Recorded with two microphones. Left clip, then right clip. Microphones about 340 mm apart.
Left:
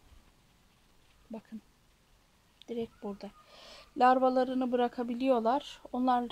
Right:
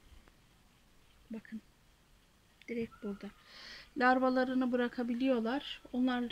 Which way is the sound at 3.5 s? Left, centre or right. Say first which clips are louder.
Right 1 dB; left.